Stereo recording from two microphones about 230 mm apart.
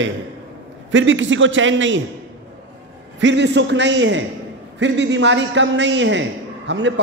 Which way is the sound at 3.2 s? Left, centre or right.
Right.